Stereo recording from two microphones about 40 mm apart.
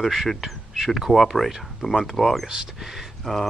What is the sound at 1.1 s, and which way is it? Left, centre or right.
Speech, centre.